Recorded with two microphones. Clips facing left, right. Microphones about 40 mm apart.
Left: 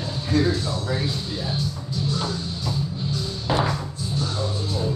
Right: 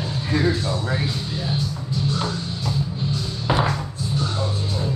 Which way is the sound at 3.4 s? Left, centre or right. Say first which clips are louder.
Right 2 dB; right.